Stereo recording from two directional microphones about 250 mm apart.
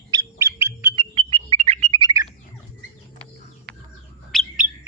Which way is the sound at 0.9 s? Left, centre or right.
Right.